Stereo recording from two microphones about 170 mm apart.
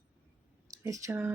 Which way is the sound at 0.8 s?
20° right (ahead or behind).